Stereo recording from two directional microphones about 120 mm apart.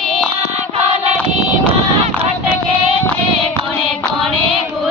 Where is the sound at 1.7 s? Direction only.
55° right (ahead or behind).